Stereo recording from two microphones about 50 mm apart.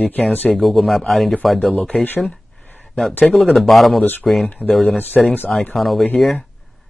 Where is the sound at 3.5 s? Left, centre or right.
Centre.